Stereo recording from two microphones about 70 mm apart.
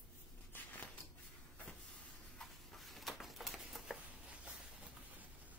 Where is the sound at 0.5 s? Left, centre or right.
Left.